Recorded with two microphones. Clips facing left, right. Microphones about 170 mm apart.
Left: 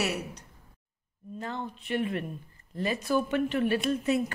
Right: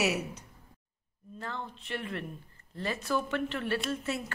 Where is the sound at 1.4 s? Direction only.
15° left (ahead or behind).